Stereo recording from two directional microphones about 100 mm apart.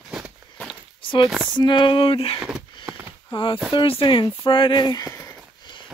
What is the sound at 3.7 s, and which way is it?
Speech, 70° left (ahead or behind).